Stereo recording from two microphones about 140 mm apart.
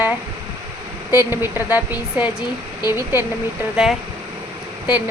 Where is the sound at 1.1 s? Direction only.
15° right (ahead or behind).